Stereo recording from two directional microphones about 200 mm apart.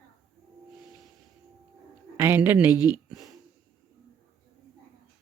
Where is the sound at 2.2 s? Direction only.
10° right (ahead or behind).